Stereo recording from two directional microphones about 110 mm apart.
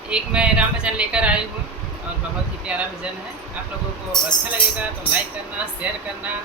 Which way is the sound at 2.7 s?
10° right (ahead or behind).